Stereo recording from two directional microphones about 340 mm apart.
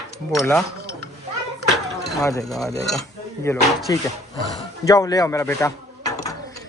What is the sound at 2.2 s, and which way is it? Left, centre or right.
Speech, centre.